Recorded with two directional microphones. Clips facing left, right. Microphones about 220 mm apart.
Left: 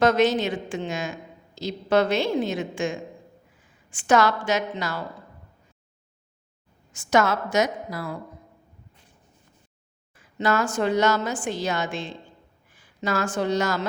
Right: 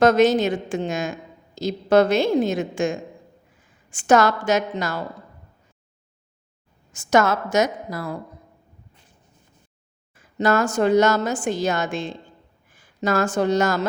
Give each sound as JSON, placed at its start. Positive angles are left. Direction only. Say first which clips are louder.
{"t": 0.0, "sound": "a woman's voice", "louder": "right 4 dB", "side_deg": -45}
{"t": 6.9, "sound": "a woman's voice", "louder": "right 3 dB", "side_deg": -45}
{"t": 10.2, "sound": "a woman's voice", "louder": "right 4 dB", "side_deg": -45}